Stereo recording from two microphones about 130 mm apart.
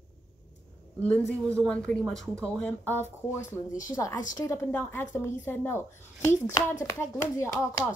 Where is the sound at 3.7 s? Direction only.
25° left (ahead or behind).